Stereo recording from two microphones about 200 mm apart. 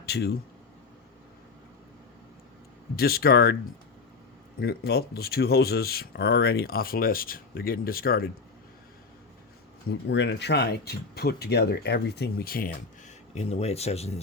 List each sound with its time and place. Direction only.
0.0 s speech: 55° left (ahead or behind)
2.9 s speech: 50° left (ahead or behind)
4.6 s speech: 50° left (ahead or behind)
9.9 s speech: 60° left (ahead or behind)
13.3 s speech: 30° left (ahead or behind)